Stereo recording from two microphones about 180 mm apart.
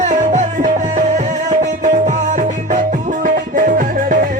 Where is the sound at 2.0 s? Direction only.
45° right (ahead or behind).